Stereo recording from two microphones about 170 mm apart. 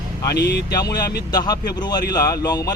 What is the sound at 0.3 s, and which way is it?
Speech, 75° left (ahead or behind).